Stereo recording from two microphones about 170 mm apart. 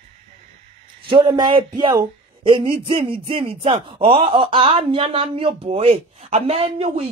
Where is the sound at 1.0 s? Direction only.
30° right (ahead or behind).